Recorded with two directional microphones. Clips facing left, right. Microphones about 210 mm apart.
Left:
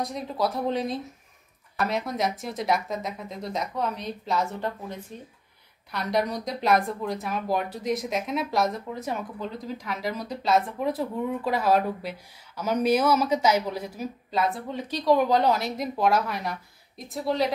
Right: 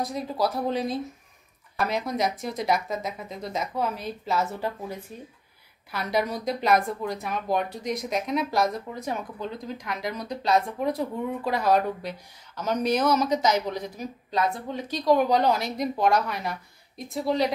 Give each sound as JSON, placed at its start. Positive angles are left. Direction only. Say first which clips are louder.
{"t": 0.0, "sound": "a woman's voice", "louder": "right 1 dB", "side_deg": 0}